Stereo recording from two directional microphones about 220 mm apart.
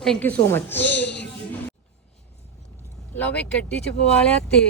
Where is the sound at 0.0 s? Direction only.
5° left (ahead or behind).